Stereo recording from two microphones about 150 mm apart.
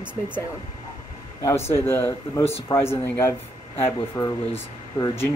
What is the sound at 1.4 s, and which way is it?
Speech, 15° left (ahead or behind).